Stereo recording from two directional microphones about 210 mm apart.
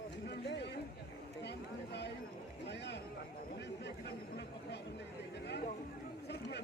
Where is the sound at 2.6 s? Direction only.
55° left (ahead or behind).